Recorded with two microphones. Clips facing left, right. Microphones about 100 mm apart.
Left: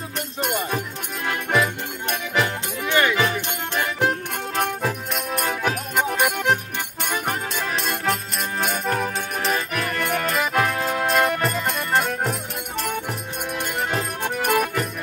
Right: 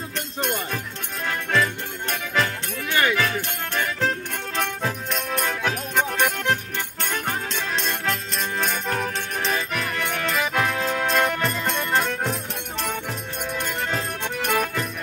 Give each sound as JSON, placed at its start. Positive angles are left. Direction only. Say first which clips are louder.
{"t": 0.4, "sound": "music", "louder": "left 3 dB", "side_deg": 10}
{"t": 4.6, "sound": "music", "louder": "left 3 dB", "side_deg": 5}
{"t": 13.5, "sound": "music", "louder": "left 2 dB", "side_deg": 10}